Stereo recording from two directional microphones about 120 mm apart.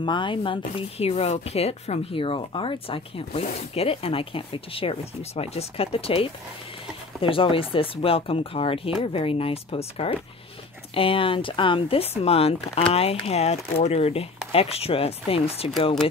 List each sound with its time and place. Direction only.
0.0 s speech: 40° left (ahead or behind)
3.3 s speech: 60° left (ahead or behind)